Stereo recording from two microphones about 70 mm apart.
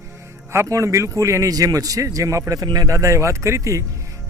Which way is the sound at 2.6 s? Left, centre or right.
Right.